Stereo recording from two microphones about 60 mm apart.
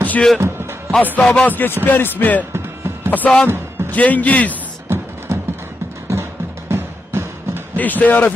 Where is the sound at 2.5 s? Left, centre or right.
Right.